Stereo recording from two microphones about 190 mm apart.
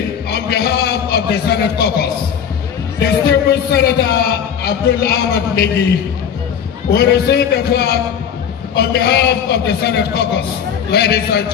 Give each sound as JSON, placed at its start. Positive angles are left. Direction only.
{"t": 0.3, "sound": "a man's voice", "side_deg": 55}
{"t": 6.9, "sound": "a man's voice", "side_deg": 55}